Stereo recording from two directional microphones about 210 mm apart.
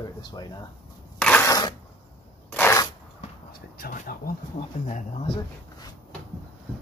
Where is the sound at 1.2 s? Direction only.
10° left (ahead or behind).